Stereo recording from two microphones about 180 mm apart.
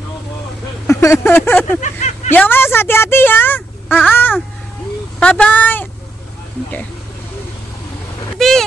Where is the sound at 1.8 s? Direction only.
40° left (ahead or behind).